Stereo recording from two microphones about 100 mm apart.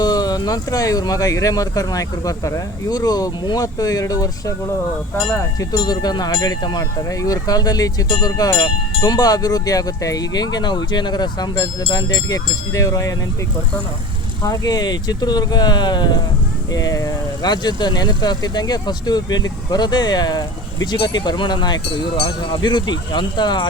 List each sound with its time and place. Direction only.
0.0 s speech: 40° left (ahead or behind)
5.7 s speech: 45° left (ahead or behind)
14.4 s speech: 35° left (ahead or behind)